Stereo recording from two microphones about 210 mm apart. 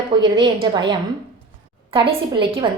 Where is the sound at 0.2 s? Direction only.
20° right (ahead or behind).